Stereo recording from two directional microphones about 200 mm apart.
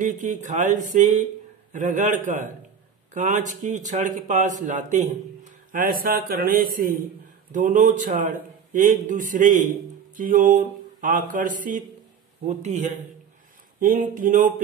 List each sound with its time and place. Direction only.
0.0 s a man's voice: 40° right (ahead or behind)
13.7 s a man's voice: 40° right (ahead or behind)